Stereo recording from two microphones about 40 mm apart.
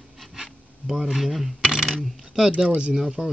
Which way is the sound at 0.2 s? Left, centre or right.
Centre.